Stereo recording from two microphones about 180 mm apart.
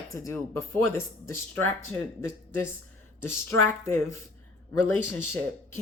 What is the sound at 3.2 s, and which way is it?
Speech, 15° left (ahead or behind).